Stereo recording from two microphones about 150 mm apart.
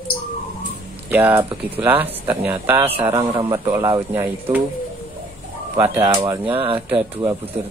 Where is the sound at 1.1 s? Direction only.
15° right (ahead or behind).